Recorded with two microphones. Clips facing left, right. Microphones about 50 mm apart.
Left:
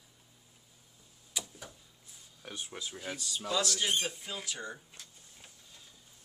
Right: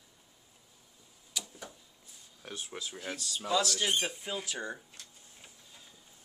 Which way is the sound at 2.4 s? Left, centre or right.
Centre.